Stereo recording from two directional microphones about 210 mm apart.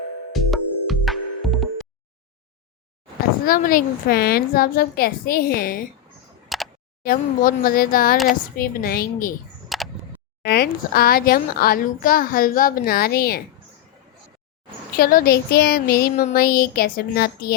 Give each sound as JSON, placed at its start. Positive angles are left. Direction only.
{"t": 0.3, "sound": "music", "side_deg": 0}
{"t": 3.4, "sound": "a child's voice", "side_deg": 40}
{"t": 6.5, "sound": "single-lens reflex camera", "side_deg": 0}
{"t": 7.0, "sound": "a child's voice", "side_deg": 40}
{"t": 9.6, "sound": "single-lens reflex camera", "side_deg": 0}
{"t": 10.4, "sound": "a child's voice", "side_deg": 45}
{"t": 14.9, "sound": "a child's voice", "side_deg": 45}